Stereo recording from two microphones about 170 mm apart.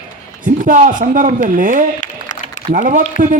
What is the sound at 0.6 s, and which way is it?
A man's voice, 50° right (ahead or behind).